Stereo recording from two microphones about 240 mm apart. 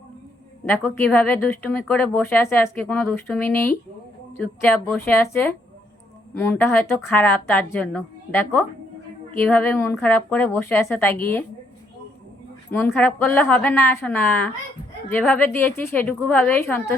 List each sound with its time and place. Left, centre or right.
0.6 s a woman's voice: centre
12.7 s a woman's voice: centre